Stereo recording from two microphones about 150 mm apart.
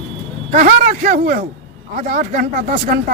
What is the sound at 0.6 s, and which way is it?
Speech, 55° right (ahead or behind).